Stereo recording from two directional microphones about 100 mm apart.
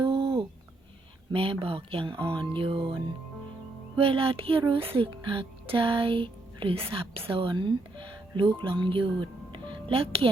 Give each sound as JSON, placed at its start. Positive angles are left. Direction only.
{"t": 0.0, "sound": "a sound", "side_deg": -55}
{"t": 1.3, "sound": "speech", "side_deg": -65}
{"t": 3.9, "sound": "speech", "side_deg": -65}